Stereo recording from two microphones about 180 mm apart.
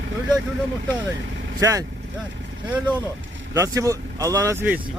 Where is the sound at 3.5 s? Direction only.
20° right (ahead or behind).